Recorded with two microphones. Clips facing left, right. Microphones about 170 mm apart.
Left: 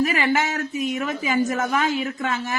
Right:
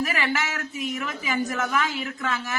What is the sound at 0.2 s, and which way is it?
Speech, 45° left (ahead or behind).